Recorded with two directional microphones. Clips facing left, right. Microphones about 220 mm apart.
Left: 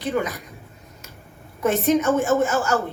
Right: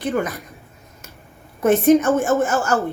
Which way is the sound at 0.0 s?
50° right (ahead or behind).